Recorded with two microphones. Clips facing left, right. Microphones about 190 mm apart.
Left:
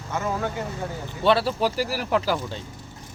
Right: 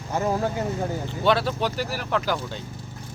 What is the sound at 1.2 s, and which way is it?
Speech, centre (ahead or behind).